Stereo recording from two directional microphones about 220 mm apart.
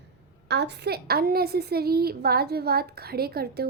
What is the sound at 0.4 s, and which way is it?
A child's voice, 50° right (ahead or behind).